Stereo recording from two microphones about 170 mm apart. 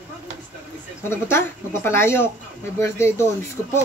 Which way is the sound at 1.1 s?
15° left (ahead or behind).